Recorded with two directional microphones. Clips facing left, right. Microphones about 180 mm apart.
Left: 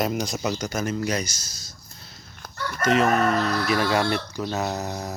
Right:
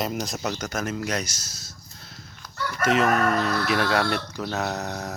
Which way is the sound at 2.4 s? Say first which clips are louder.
Left 7 dB; 50° left (ahead or behind).